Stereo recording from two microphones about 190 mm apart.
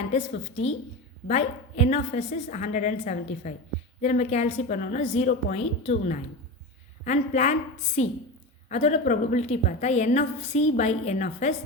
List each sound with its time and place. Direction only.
0.1 s a woman's voice: 35° left (ahead or behind)